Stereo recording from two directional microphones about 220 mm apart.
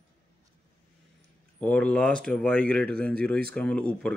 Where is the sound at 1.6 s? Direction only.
5° left (ahead or behind).